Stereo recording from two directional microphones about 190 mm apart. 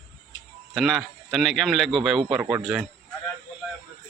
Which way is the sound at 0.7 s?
Centre (ahead or behind).